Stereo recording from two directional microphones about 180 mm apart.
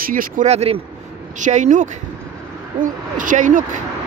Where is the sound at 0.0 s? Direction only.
50° right (ahead or behind).